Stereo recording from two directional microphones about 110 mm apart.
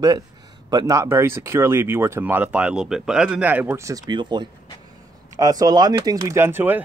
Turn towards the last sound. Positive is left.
turn(degrees=-20)  # may be behind; listen again after turning